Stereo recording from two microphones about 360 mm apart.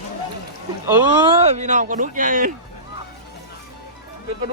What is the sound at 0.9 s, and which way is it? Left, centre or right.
Speech, centre.